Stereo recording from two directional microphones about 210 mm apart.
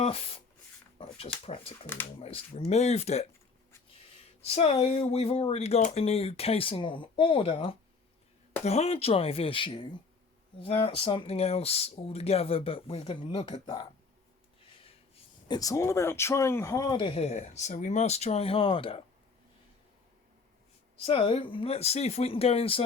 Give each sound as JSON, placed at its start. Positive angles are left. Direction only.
{"t": 0.0, "sound": "speech", "side_deg": 25}
{"t": 4.4, "sound": "speech", "side_deg": 30}
{"t": 14.8, "sound": "speech", "side_deg": 25}
{"t": 21.0, "sound": "speech", "side_deg": 25}